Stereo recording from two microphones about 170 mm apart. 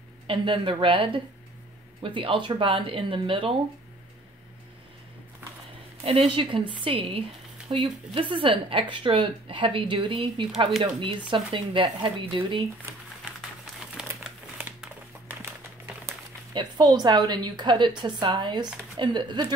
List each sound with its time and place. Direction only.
0.3 s speech: 30° right (ahead or behind)
6.0 s speech: 30° right (ahead or behind)
14.6 s a sound: 10° right (ahead or behind)
16.5 s a woman's voice: 25° right (ahead or behind)